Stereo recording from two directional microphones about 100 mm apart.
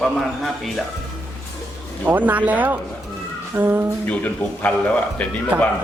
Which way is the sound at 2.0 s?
15° right (ahead or behind).